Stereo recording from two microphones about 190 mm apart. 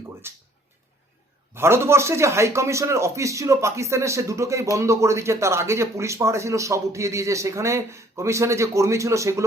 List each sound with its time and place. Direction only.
0.2 s speech: 15° right (ahead or behind)
1.5 s speech: 15° right (ahead or behind)